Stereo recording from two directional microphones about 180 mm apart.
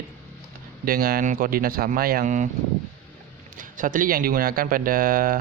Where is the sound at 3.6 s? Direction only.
50° right (ahead or behind).